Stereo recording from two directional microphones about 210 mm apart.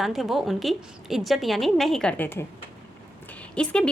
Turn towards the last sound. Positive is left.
turn(degrees=5)  # may be behind; listen again after turning